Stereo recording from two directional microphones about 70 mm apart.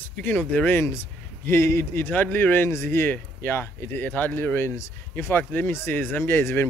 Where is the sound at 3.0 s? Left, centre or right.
Left.